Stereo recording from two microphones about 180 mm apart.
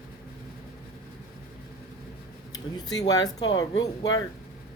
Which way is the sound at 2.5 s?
20° left (ahead or behind).